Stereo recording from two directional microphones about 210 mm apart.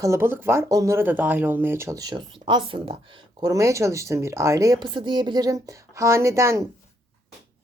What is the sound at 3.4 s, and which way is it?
Speech, 15° right (ahead or behind).